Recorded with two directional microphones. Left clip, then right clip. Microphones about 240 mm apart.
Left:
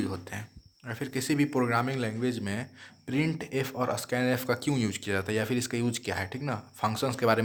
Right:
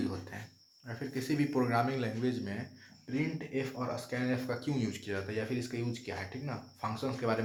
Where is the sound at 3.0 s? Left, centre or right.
Left.